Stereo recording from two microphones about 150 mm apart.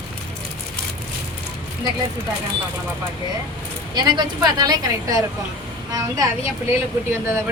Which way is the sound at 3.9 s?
30° right (ahead or behind).